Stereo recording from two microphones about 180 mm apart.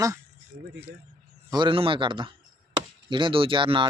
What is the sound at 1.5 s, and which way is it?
Speech, 25° right (ahead or behind).